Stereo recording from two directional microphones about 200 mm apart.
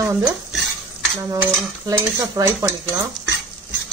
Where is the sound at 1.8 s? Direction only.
20° right (ahead or behind).